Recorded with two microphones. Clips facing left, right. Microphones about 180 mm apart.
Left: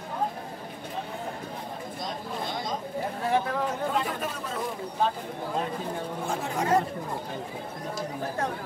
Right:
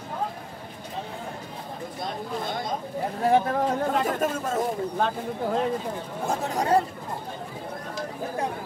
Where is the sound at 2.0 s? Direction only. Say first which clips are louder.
Right 3 dB; 55° right (ahead or behind).